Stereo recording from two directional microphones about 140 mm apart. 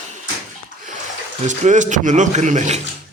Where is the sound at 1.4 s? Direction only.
60° right (ahead or behind).